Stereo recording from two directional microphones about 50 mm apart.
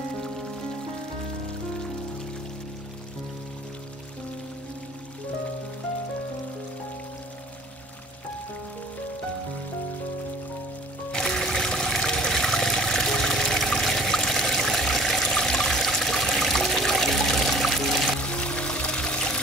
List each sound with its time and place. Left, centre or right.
11.1 s water: centre
18.2 s pour: left